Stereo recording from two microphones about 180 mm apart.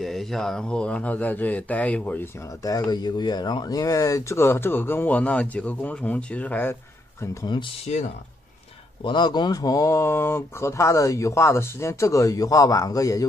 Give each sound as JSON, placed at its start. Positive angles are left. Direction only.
{"t": 0.0, "sound": "speech", "side_deg": 0}
{"t": 2.6, "sound": "speech", "side_deg": 20}
{"t": 7.8, "sound": "speech", "side_deg": 40}
{"t": 9.0, "sound": "speech", "side_deg": 25}